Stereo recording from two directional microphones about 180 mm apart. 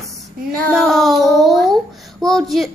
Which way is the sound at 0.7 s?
Centre (ahead or behind).